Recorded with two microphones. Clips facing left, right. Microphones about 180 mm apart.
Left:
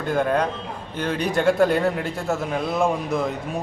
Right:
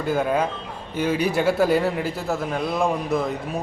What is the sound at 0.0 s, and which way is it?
A man's voice, 5° right (ahead or behind).